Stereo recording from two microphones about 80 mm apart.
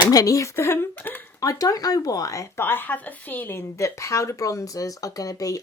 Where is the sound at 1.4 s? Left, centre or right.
Left.